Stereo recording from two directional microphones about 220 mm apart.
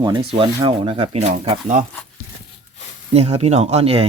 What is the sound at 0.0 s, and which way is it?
Speech, 25° right (ahead or behind).